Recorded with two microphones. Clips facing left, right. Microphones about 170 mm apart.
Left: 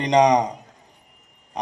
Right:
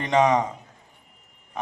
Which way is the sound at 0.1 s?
20° left (ahead or behind).